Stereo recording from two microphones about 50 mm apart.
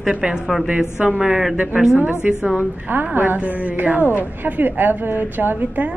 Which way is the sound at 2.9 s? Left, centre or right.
Right.